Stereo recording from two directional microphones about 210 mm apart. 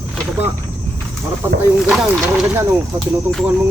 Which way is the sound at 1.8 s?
5° right (ahead or behind).